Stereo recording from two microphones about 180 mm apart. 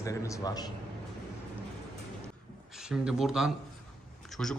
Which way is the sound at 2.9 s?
5° right (ahead or behind).